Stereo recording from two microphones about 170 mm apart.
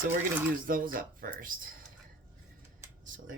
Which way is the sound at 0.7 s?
55° right (ahead or behind).